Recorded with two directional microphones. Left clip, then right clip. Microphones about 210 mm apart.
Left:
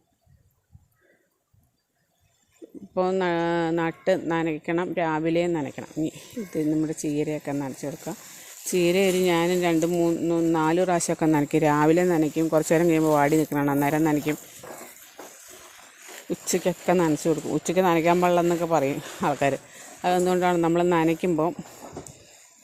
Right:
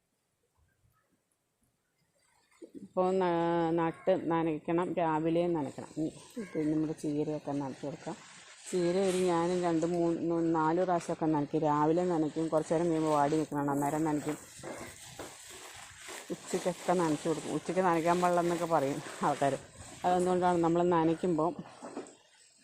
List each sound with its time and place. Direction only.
2.9 s speech: 30° left (ahead or behind)
11.4 s speech: 35° left (ahead or behind)
11.7 s speech: 45° left (ahead or behind)
16.5 s speech: 55° left (ahead or behind); by 21.5 s 35° left (ahead or behind)
21.8 s a sound: 45° left (ahead or behind)